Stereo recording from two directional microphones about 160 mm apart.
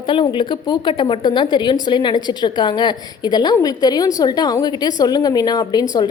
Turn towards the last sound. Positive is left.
turn(degrees=25)  # may be behind; listen again after turning